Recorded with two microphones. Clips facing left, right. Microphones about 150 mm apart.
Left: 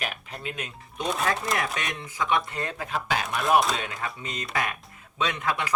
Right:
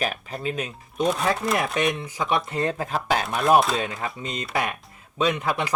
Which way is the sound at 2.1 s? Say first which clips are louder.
Right 2 dB; 30° right (ahead or behind).